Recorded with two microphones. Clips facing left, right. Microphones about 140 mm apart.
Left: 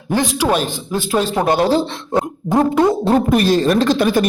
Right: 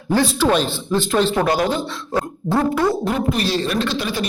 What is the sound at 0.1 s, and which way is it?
A man's voice, 15° left (ahead or behind).